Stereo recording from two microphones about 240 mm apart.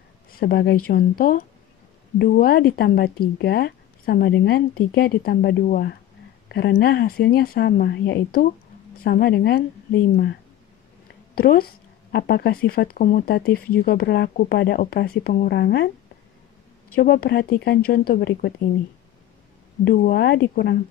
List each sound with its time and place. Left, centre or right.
0.3 s speech: left
11.3 s speech: left
16.9 s speech: left
19.8 s speech: left